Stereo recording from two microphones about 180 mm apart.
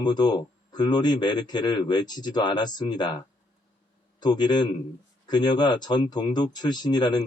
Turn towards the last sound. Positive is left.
turn(degrees=25)  # may be behind; listen again after turning